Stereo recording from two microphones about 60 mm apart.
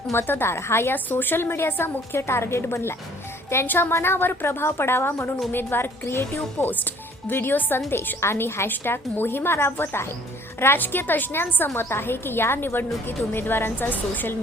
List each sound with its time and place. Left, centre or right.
0.1 s a woman's voice: left
0.9 s a woman's voice: left